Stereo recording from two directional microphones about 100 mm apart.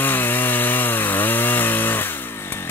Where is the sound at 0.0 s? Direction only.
20° left (ahead or behind).